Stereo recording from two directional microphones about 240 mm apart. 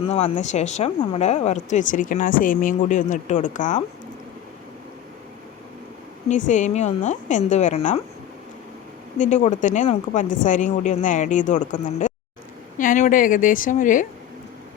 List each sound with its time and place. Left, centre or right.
0.0 s speech: left
6.2 s speech: left
9.1 s speech: left